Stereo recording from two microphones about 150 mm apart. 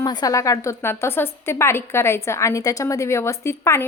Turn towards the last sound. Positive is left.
turn(degrees=20)  # may be behind; listen again after turning